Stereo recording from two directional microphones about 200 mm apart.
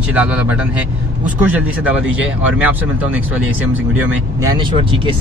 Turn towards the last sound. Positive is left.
turn(degrees=-25)  # may be behind; listen again after turning